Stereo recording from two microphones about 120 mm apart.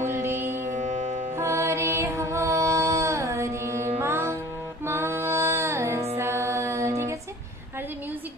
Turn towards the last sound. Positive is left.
turn(degrees=-25)  # may be behind; listen again after turning